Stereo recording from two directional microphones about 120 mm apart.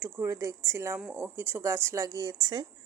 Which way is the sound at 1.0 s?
10° right (ahead or behind).